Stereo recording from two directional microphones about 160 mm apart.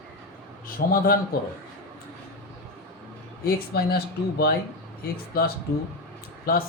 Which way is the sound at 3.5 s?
75° left (ahead or behind).